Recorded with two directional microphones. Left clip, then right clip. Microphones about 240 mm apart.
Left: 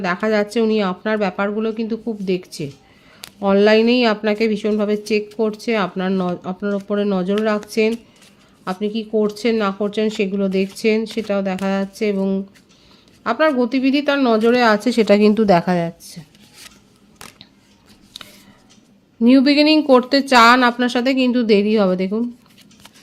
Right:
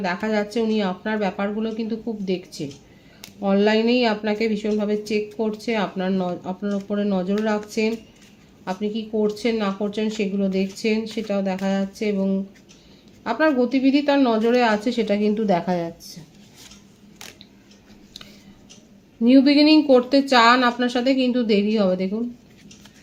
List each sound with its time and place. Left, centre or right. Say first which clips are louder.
0.0 s speech: left 5 dB; left
19.2 s speech: left 2 dB; left